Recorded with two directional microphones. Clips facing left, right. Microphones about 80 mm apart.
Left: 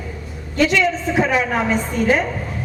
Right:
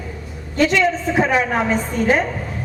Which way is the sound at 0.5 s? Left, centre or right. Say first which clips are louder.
Right 1 dB; right.